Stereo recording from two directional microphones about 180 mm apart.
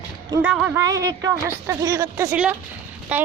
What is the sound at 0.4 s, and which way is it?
Speech, 5° right (ahead or behind).